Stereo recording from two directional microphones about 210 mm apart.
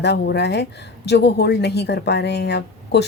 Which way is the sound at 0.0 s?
50° left (ahead or behind).